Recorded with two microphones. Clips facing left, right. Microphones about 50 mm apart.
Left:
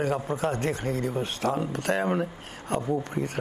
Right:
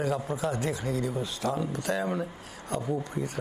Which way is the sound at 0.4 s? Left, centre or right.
Left.